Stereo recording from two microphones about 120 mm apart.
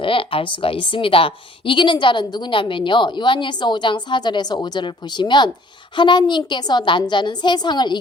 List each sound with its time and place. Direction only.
0.0 s a woman's voice: 50° left (ahead or behind)